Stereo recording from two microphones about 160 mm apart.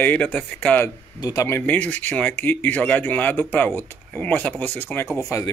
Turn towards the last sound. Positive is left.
turn(degrees=20)  # may be behind; listen again after turning